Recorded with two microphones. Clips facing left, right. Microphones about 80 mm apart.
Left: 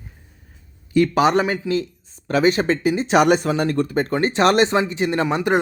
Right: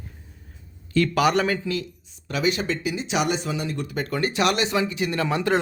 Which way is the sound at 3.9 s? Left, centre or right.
Left.